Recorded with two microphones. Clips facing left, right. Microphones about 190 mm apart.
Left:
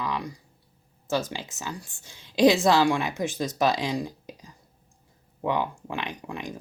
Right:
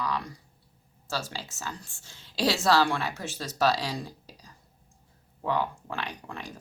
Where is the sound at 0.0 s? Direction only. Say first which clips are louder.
Left 1 dB; 15° left (ahead or behind).